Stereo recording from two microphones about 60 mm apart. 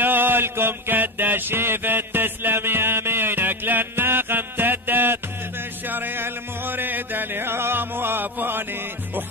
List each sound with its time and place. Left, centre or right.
0.0 s mantra: right
5.9 s music: right